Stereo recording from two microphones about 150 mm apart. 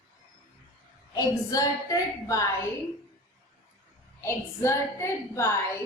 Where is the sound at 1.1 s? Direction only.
25° left (ahead or behind).